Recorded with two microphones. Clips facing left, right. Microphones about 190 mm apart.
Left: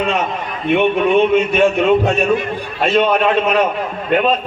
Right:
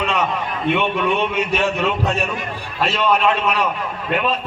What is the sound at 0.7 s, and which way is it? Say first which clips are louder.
A man's voice: left 7 dB; 50° left (ahead or behind).